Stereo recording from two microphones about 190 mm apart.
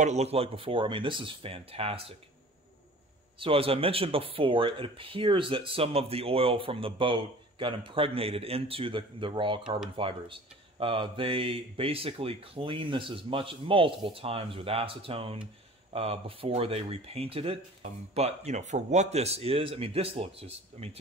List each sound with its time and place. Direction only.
0.0 s speech: 35° right (ahead or behind)
3.3 s speech: 30° right (ahead or behind)